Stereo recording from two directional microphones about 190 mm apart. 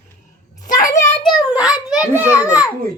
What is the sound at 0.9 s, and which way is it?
A child's voice, 15° left (ahead or behind).